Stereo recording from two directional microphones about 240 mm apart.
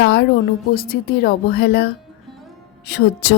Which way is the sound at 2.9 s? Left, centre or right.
Left.